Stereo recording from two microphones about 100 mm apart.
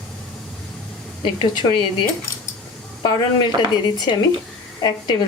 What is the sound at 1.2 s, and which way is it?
Speech, 55° left (ahead or behind).